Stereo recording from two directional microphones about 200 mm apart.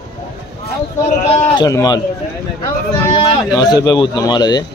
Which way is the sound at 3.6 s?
20° left (ahead or behind).